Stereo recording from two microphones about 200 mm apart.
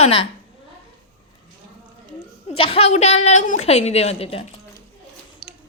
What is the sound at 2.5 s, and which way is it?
A woman's voice, 30° left (ahead or behind).